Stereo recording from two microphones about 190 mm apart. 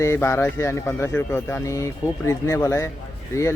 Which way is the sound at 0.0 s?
15° left (ahead or behind).